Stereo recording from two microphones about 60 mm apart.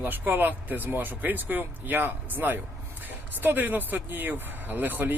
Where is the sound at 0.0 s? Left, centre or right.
Right.